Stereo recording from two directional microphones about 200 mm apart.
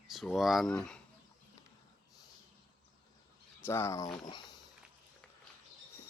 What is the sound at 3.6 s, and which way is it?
Speech, 15° left (ahead or behind).